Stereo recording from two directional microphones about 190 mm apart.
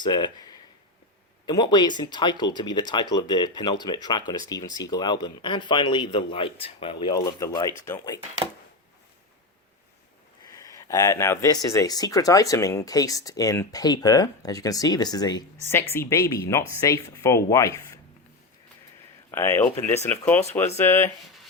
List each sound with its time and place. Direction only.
0.0 s speech: 25° left (ahead or behind)
10.5 s speech: 15° left (ahead or behind)
19.3 s speech: 15° left (ahead or behind)
19.6 s speech: 35° left (ahead or behind)
20.1 s speech: 10° left (ahead or behind)